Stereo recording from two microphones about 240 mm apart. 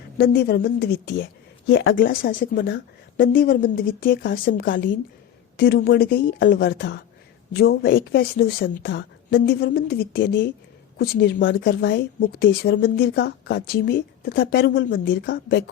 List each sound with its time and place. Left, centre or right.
0.2 s a woman's voice: left
2.0 s a woman's voice: left